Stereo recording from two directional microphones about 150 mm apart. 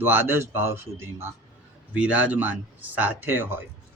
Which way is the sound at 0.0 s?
15° right (ahead or behind).